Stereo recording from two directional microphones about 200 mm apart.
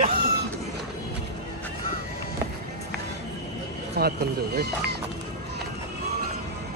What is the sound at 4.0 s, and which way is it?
Speech, 50° right (ahead or behind).